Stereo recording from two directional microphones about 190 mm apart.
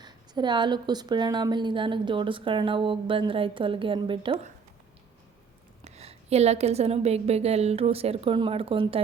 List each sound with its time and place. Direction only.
0.0 s a woman's voice: 25° right (ahead or behind)
5.8 s a woman's voice: 35° right (ahead or behind)